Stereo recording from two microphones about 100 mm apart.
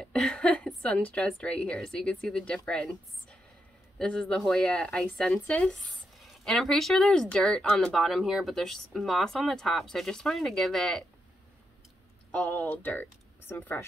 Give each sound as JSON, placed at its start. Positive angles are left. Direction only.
{"t": 0.0, "sound": "a sound", "side_deg": 5}
{"t": 0.8, "sound": "speech", "side_deg": 10}
{"t": 12.3, "sound": "speech", "side_deg": 15}